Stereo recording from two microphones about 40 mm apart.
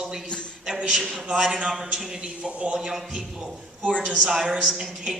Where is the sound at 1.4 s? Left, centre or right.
Centre.